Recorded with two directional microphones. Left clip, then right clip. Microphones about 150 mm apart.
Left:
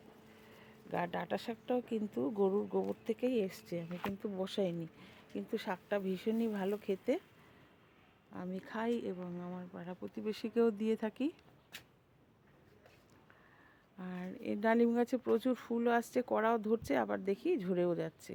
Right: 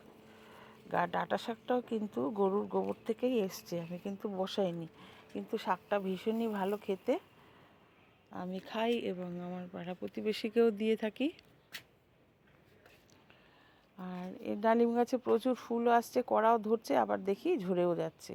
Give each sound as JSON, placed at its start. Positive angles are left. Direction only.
{"t": 0.5, "sound": "speech", "side_deg": 15}
{"t": 8.3, "sound": "speech", "side_deg": 5}
{"t": 14.0, "sound": "speech", "side_deg": 15}